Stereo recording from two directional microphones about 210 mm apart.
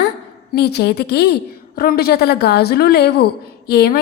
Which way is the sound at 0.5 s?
50° left (ahead or behind).